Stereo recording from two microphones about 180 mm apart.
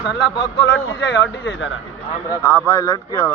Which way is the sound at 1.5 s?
90° left.